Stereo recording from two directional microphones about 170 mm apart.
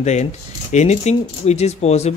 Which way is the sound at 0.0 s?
40° left (ahead or behind).